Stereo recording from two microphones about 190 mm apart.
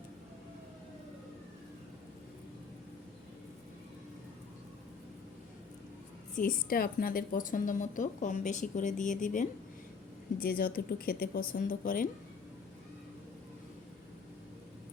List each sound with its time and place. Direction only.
6.3 s a woman's voice: 50° left (ahead or behind)